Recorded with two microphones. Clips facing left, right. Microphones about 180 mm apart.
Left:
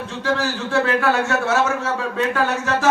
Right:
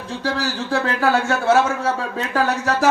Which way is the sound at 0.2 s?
35° right (ahead or behind).